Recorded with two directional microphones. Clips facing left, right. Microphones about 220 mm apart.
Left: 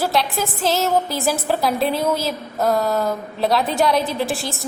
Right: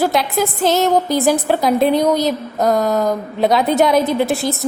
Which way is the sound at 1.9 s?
20° right (ahead or behind).